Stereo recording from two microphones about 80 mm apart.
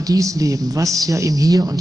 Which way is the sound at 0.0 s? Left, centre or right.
Right.